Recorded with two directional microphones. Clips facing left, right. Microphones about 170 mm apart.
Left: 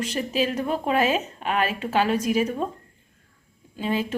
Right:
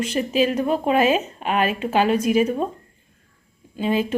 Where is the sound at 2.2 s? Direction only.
55° right (ahead or behind).